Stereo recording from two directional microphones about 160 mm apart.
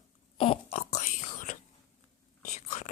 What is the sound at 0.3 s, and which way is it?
Whispering, 35° left (ahead or behind).